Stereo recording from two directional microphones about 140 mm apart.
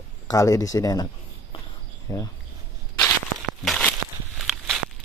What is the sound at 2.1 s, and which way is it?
Speech, 30° left (ahead or behind).